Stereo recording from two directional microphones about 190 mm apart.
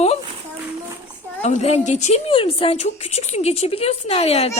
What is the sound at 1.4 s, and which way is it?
A woman's voice, 35° left (ahead or behind).